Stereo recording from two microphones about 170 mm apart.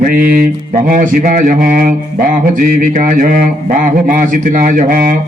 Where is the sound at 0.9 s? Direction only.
55° right (ahead or behind).